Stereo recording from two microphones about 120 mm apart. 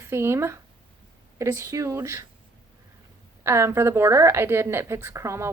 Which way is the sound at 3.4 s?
20° right (ahead or behind).